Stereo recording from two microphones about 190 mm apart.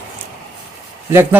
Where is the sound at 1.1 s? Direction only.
10° right (ahead or behind).